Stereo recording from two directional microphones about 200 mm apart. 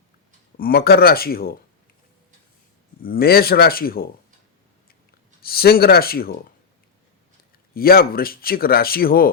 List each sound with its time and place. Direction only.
0.5 s speech: 45° left (ahead or behind)
3.0 s speech: 45° left (ahead or behind)
5.4 s speech: 50° left (ahead or behind)
7.7 s speech: 50° left (ahead or behind)